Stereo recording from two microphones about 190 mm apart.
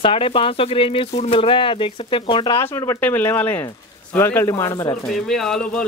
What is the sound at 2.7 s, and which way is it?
Speech, 15° left (ahead or behind).